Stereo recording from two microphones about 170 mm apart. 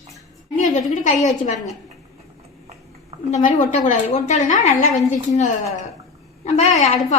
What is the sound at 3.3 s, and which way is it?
A woman's voice, 50° left (ahead or behind).